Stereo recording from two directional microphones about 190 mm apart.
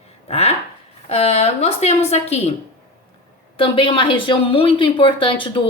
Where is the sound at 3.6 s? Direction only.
30° left (ahead or behind).